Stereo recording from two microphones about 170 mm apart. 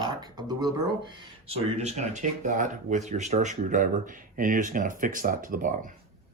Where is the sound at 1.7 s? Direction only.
45° right (ahead or behind).